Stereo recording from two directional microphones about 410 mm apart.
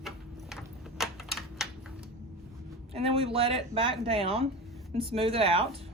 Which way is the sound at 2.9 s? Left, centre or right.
Centre.